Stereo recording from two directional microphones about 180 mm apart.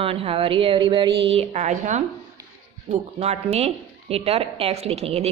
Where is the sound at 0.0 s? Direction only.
30° right (ahead or behind).